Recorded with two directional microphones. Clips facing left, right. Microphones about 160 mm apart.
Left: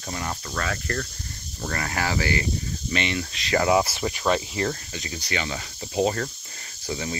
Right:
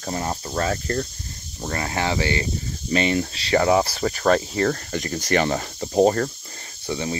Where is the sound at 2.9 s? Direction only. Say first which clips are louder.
Right 7 dB; 40° right (ahead or behind).